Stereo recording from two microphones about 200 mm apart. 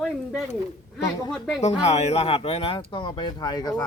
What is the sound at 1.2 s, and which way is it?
Speech, centre (ahead or behind).